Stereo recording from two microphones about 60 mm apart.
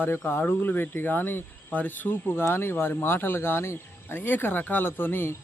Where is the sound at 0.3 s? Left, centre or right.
Left.